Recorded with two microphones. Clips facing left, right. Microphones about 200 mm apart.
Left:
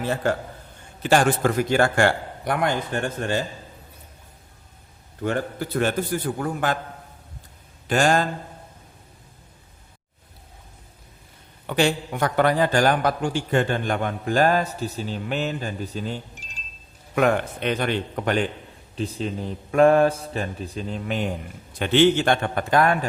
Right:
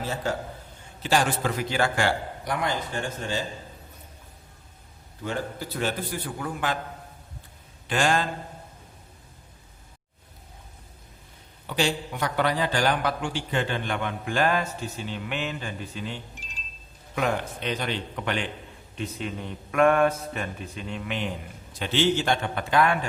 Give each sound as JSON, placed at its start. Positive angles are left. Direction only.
{"t": 0.0, "sound": "a man's voice", "side_deg": 55}
{"t": 5.2, "sound": "a man's voice", "side_deg": 55}
{"t": 7.9, "sound": "a man's voice", "side_deg": 45}
{"t": 11.6, "sound": "a man's voice", "side_deg": 55}
{"t": 17.2, "sound": "a man's voice", "side_deg": 60}
{"t": 18.9, "sound": "speech", "side_deg": 30}